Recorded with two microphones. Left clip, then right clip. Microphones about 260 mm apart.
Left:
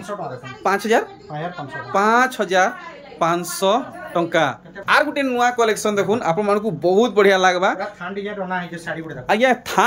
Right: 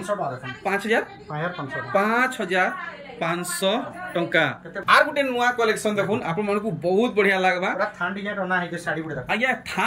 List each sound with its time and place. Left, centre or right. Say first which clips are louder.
0.7 s speech: left 5 dB; centre
8.5 s speech: right 1 dB; centre
9.3 s speech: left 7 dB; centre